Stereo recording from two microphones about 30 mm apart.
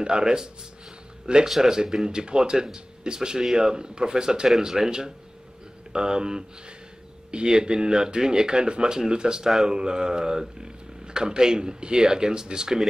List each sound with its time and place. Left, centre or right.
0.0 s speech: right